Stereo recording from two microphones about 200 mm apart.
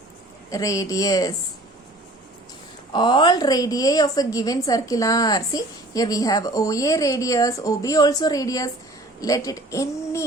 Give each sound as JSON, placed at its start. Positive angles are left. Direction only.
{"t": 0.5, "sound": "a woman's voice", "side_deg": 15}
{"t": 2.9, "sound": "a woman's voice", "side_deg": 25}